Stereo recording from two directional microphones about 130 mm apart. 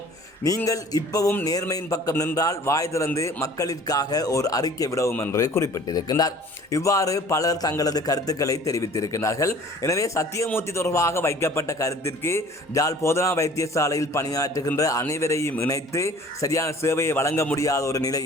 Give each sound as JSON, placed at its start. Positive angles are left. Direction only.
{"t": 0.4, "sound": "a man's voice", "side_deg": 25}